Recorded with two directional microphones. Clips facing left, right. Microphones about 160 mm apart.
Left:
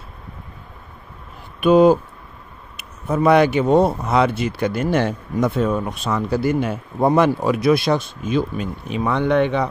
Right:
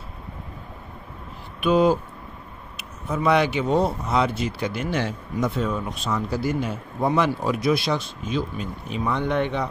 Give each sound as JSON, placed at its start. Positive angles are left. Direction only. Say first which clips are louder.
{"t": 1.6, "sound": "speech", "louder": "left 6 dB", "side_deg": 50}
{"t": 7.4, "sound": "speech", "louder": "left 5 dB", "side_deg": 60}